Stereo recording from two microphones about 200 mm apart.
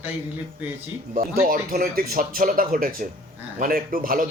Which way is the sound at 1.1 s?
45° right (ahead or behind).